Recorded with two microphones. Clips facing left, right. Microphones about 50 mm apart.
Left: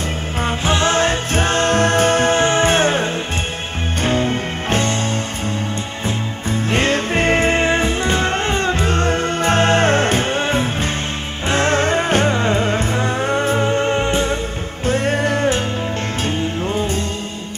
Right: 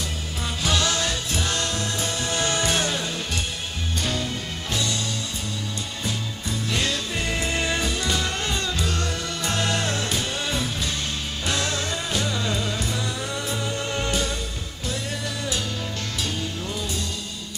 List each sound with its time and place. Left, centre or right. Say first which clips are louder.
0.4 s music: left 7 dB; left
6.0 s music: left 7 dB; left
14.9 s music: left 13 dB; left